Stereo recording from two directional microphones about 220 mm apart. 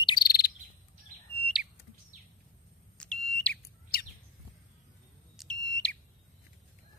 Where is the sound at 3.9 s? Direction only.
40° left (ahead or behind).